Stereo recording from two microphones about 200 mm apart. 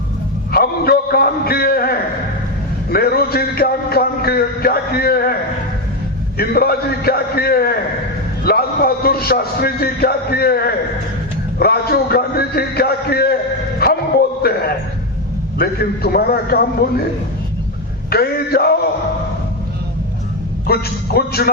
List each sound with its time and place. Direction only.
0.5 s a sound: 50° left (ahead or behind)
2.9 s a man's voice: 50° left (ahead or behind)
13.7 s a sound: 50° left (ahead or behind)
15.5 s a man's voice: 50° left (ahead or behind)
18.1 s a man's voice: 50° left (ahead or behind)
20.7 s a man's voice: 50° left (ahead or behind)